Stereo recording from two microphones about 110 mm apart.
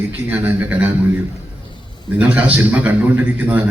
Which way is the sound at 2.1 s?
15° right (ahead or behind).